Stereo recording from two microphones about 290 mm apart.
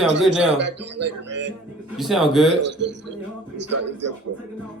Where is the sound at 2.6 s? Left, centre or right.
Right.